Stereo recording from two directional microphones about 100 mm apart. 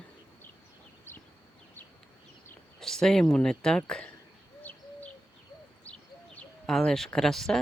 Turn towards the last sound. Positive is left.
turn(degrees=5)  # may be behind; listen again after turning